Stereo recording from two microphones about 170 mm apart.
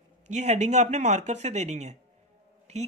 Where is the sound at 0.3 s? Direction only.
45° right (ahead or behind).